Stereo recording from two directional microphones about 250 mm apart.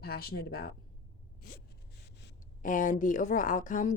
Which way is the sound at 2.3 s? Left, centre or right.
Left.